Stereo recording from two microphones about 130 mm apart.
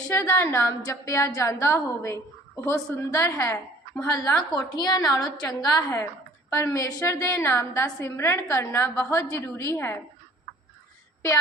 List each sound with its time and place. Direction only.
0.1 s a woman's voice: 15° left (ahead or behind)
4.5 s a woman's voice: 30° left (ahead or behind)